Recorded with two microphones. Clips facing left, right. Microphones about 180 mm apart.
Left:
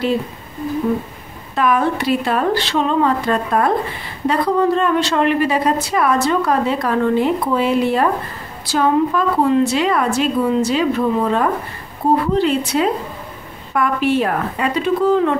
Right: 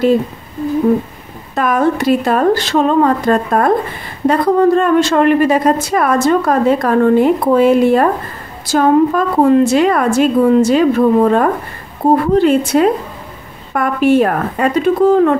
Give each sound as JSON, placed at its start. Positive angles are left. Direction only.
{"t": 1.5, "sound": "a woman's voice", "side_deg": -45}